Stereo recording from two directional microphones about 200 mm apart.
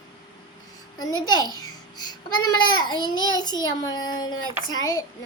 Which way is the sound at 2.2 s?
90° left.